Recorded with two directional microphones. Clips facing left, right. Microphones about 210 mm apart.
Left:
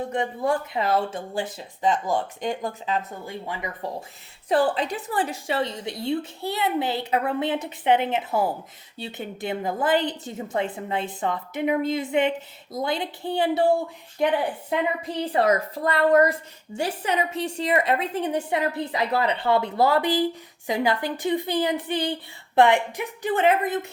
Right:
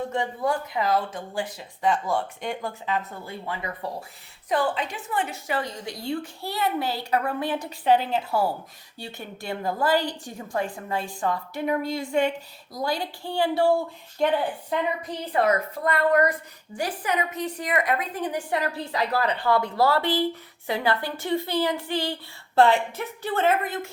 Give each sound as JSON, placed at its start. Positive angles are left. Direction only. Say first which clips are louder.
{"t": 0.1, "sound": "a woman's voice", "louder": "left 2 dB", "side_deg": 25}
{"t": 4.4, "sound": "a woman's voice", "louder": "left 4 dB", "side_deg": 35}
{"t": 14.7, "sound": "a woman's voice", "louder": "left 3 dB", "side_deg": 30}